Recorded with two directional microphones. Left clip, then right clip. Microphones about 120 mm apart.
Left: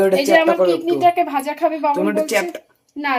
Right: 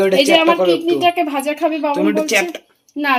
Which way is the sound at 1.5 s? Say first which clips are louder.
Even; 55° right (ahead or behind).